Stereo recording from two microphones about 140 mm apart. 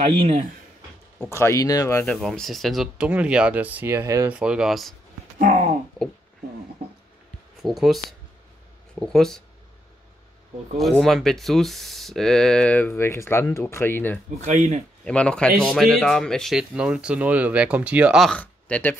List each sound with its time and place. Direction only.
0.0 s speech: 45° right (ahead or behind)
1.3 s speech: 20° left (ahead or behind)
2.0 s speech: 5° left (ahead or behind); by 4.3 s 20° right (ahead or behind)
4.3 s speech: 5° right (ahead or behind)
5.4 s a sound: 60° right (ahead or behind)
7.6 s speech: centre (ahead or behind)
9.0 s speech: 5° left (ahead or behind)
10.8 s speech: centre (ahead or behind)
14.4 s speech: 55° right (ahead or behind)
15.0 s speech: 10° left (ahead or behind)
18.3 s speech: 10° left (ahead or behind)